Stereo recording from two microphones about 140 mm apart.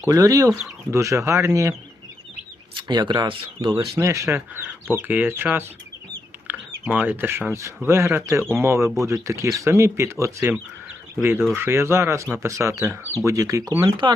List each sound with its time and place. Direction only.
0.0 s speech: 25° right (ahead or behind)
2.8 s speech: 30° right (ahead or behind)
3.9 s speech: 20° right (ahead or behind)
14.0 s speech: 35° right (ahead or behind)